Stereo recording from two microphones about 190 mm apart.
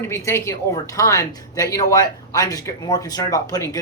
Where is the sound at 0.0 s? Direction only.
15° left (ahead or behind).